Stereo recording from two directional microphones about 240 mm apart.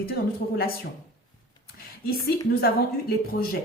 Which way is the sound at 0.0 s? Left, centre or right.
Left.